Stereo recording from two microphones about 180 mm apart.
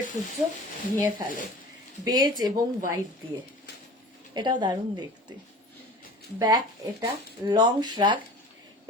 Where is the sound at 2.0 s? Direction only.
20° right (ahead or behind).